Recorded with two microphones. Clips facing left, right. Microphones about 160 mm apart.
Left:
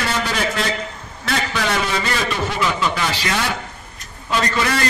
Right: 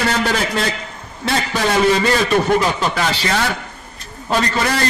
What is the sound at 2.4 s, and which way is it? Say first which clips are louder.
Speech: right 4 dB; 40° right (ahead or behind).